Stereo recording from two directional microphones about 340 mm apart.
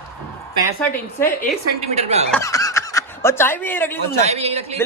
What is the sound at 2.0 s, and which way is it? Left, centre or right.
Speech, centre.